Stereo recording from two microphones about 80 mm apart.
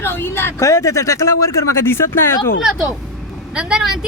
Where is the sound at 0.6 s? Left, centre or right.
Left.